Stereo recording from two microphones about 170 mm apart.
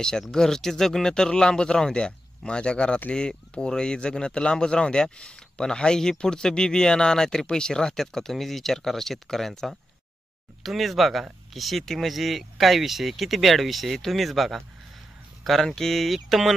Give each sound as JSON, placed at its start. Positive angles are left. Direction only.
{"t": 0.0, "sound": "speech", "side_deg": 5}